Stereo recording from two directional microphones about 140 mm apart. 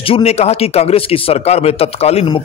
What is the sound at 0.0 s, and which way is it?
Speech, 45° left (ahead or behind).